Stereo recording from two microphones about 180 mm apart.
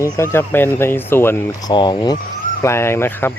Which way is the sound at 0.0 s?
15° left (ahead or behind).